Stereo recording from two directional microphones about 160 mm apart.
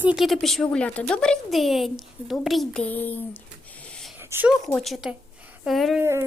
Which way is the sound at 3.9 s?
5° left (ahead or behind).